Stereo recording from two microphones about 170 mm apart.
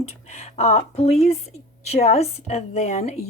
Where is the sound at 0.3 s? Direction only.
40° left (ahead or behind).